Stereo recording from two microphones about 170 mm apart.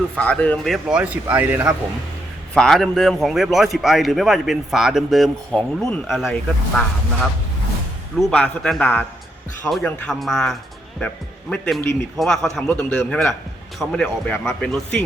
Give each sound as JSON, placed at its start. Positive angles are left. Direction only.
{"t": 0.2, "sound": "a man's voice", "side_deg": 10}
{"t": 2.6, "sound": "a man's voice", "side_deg": 0}
{"t": 8.2, "sound": "a man's voice", "side_deg": 5}